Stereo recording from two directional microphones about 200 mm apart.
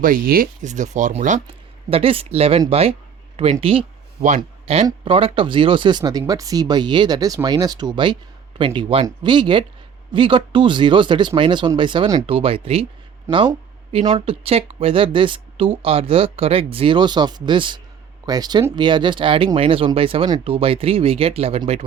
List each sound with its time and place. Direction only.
0.0 s speech: 45° right (ahead or behind)
1.9 s speech: 30° right (ahead or behind)
13.3 s speech: 15° right (ahead or behind)
13.9 s speech: 30° right (ahead or behind)